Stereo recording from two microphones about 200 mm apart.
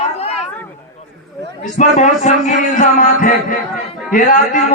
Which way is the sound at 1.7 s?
35° left (ahead or behind).